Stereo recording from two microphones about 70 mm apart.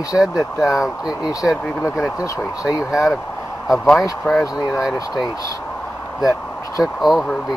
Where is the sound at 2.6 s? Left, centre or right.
Left.